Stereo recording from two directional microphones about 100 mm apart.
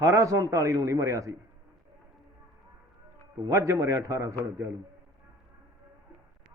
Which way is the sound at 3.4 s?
30° right (ahead or behind).